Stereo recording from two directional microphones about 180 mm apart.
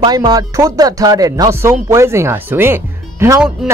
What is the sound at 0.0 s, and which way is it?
Speech, 20° right (ahead or behind).